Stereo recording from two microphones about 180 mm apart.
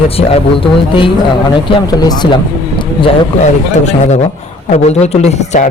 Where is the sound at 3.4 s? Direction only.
40° left (ahead or behind).